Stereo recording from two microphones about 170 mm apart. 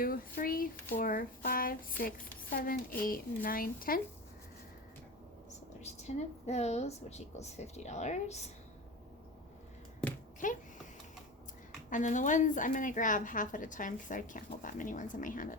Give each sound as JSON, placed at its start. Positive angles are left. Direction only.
{"t": 0.0, "sound": "speech", "side_deg": 60}
{"t": 5.8, "sound": "a woman's voice", "side_deg": 40}
{"t": 10.4, "sound": "a woman's voice", "side_deg": 50}
{"t": 11.9, "sound": "a woman's voice", "side_deg": 50}